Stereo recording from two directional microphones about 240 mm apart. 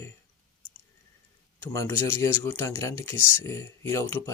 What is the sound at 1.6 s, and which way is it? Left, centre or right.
Speech, centre.